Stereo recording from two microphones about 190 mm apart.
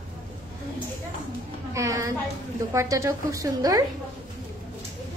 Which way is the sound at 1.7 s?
15° right (ahead or behind).